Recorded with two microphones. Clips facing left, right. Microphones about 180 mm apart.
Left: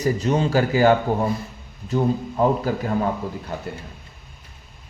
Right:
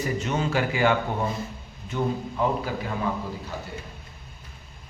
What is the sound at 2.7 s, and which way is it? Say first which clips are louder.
Speech: left 6 dB; 45° left (ahead or behind).